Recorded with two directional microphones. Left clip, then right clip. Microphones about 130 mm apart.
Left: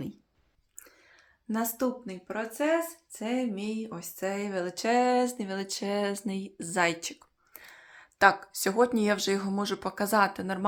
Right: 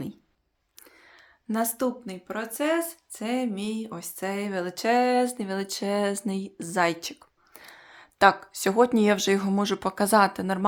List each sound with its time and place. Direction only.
0.9 s speech: 25° right (ahead or behind)